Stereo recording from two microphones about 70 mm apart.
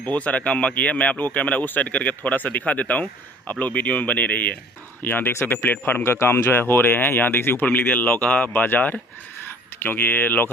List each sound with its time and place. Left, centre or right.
0.0 s speech: centre